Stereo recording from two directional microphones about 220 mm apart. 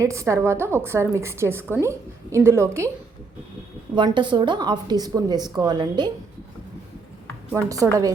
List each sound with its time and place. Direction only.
0.0 s a woman's voice: 15° right (ahead or behind)
3.9 s a woman's voice: 20° right (ahead or behind)
7.5 s a woman's voice: 15° right (ahead or behind)